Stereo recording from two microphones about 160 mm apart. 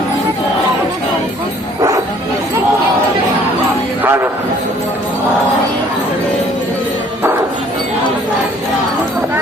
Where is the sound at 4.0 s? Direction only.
15° right (ahead or behind).